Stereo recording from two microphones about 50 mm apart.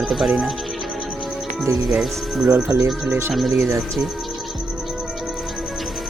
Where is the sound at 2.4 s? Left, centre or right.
Right.